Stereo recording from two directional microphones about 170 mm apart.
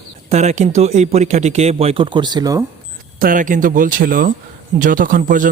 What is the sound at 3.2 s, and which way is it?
A man's voice, 55° right (ahead or behind).